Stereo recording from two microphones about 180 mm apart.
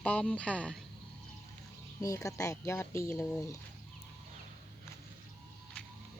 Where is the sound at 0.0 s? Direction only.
5° left (ahead or behind).